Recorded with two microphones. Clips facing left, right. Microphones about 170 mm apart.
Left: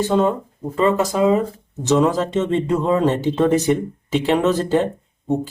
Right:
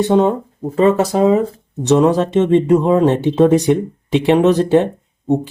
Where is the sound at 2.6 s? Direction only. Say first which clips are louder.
Right 5 dB; 10° right (ahead or behind).